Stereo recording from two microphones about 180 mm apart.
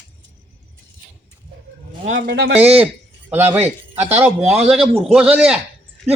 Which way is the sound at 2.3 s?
80° right.